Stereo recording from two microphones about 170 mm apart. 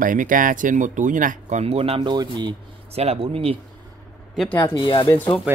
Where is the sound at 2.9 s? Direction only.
35° right (ahead or behind).